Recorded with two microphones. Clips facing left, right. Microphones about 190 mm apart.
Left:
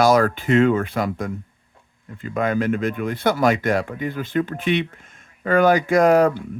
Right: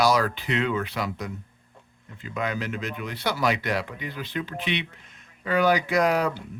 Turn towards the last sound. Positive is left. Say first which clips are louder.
# left 8 dB
turn(degrees=50)  # may be behind; listen again after turning